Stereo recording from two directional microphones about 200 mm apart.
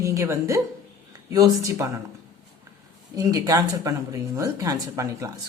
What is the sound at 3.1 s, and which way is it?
Speech, 15° right (ahead or behind).